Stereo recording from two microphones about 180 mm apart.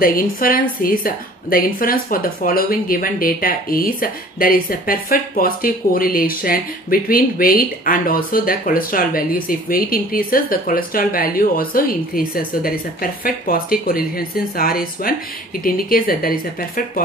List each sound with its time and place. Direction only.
0.0 s a woman's voice: 55° left (ahead or behind)